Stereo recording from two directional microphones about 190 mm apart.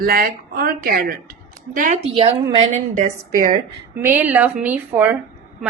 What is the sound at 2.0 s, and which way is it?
A woman's voice, 30° right (ahead or behind).